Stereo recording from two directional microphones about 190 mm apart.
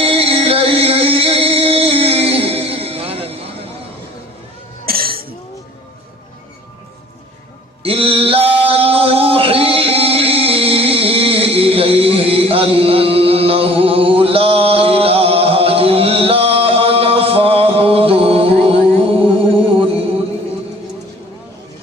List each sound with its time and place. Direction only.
0.0 s music: 30° right (ahead or behind)
4.9 s a sound: 50° right (ahead or behind)
7.8 s male singing: 30° right (ahead or behind)
18.7 s music: 30° right (ahead or behind)